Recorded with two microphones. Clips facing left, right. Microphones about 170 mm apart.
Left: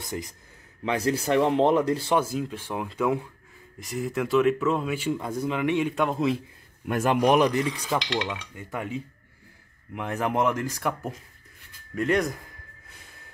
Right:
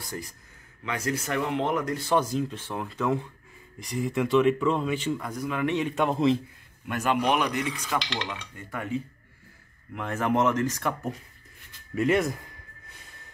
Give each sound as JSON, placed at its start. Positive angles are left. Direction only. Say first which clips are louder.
{"t": 0.0, "sound": "speech", "louder": "left 3 dB", "side_deg": 20}
{"t": 0.8, "sound": "speech", "louder": "left 5 dB", "side_deg": 30}
{"t": 2.1, "sound": "speech", "louder": "even", "side_deg": 10}
{"t": 5.1, "sound": "speech", "louder": "left 3 dB", "side_deg": 25}
{"t": 5.6, "sound": "speech", "louder": "even", "side_deg": 10}
{"t": 7.2, "sound": "speech", "louder": "left 8 dB", "side_deg": 40}
{"t": 8.2, "sound": "speech", "louder": "left 4 dB", "side_deg": 15}
{"t": 11.9, "sound": "speech", "louder": "right 1 dB", "side_deg": -5}